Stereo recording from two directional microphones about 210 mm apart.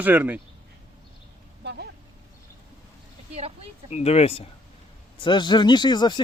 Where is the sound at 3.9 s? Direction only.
30° left (ahead or behind).